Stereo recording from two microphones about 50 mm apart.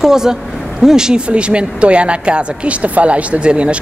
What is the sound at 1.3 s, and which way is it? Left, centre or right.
A woman's voice, right.